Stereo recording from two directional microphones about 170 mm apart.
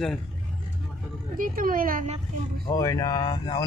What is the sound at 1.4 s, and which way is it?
Speech, 55° right (ahead or behind).